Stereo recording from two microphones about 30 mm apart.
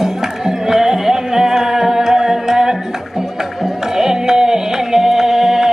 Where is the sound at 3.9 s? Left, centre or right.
Centre.